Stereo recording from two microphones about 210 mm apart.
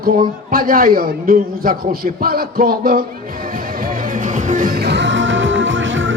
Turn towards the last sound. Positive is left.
turn(degrees=-65)  # may be behind; listen again after turning